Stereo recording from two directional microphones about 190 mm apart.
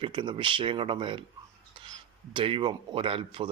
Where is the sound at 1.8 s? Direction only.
25° right (ahead or behind).